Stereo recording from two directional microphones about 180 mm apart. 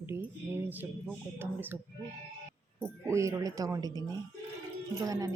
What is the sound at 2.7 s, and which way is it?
Speech, 15° right (ahead or behind).